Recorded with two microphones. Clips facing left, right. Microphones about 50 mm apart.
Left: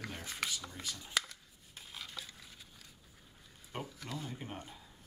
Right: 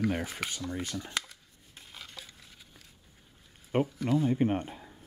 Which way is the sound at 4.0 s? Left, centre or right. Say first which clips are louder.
Right 16 dB; centre.